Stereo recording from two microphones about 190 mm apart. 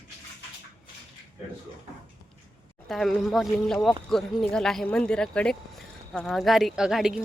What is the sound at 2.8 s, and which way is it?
Speech, centre (ahead or behind).